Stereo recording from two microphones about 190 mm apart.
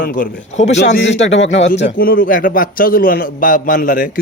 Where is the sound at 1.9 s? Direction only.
50° left (ahead or behind).